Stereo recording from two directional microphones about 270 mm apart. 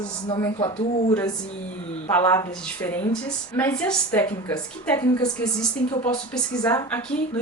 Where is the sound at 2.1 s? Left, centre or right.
Centre.